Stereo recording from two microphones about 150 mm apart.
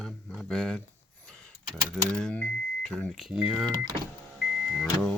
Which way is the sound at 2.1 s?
5° left (ahead or behind).